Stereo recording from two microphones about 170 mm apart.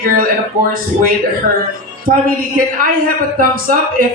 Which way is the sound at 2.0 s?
55° right (ahead or behind).